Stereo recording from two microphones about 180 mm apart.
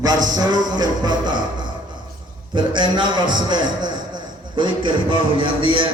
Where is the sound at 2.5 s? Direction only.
25° right (ahead or behind).